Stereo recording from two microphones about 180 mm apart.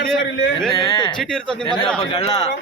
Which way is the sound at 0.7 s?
20° left (ahead or behind).